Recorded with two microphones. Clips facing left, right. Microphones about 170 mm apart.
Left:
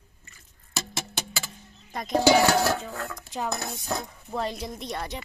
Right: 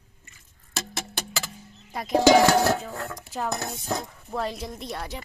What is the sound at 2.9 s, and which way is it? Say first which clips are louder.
Speech: right 1 dB; 35° right (ahead or behind).